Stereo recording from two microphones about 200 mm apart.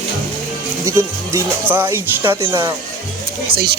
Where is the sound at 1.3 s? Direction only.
10° right (ahead or behind).